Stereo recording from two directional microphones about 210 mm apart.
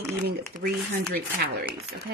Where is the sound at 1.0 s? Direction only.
50° right (ahead or behind).